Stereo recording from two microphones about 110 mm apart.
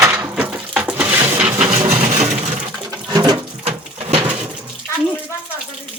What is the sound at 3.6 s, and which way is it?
Bird, 60° right (ahead or behind).